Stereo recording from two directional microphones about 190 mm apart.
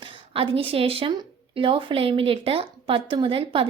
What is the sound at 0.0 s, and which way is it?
Speech, 25° right (ahead or behind).